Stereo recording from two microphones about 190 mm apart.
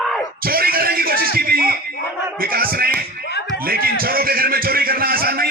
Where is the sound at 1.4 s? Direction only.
50° right (ahead or behind).